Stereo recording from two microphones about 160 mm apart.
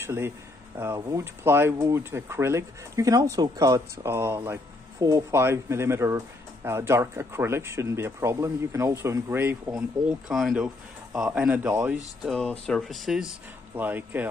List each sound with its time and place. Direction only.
0.0 s speech: 15° right (ahead or behind)
12.2 s speech: 5° left (ahead or behind)